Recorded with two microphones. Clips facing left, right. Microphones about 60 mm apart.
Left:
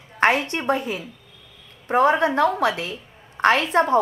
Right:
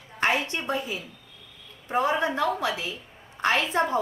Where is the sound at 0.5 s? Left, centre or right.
Left.